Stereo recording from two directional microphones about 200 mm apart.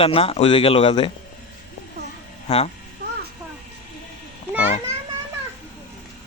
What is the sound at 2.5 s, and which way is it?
Speech, 35° left (ahead or behind).